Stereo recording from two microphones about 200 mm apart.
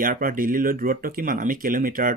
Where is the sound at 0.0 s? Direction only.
45° right (ahead or behind).